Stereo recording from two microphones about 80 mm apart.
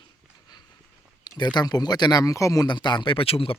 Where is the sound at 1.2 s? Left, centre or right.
Left.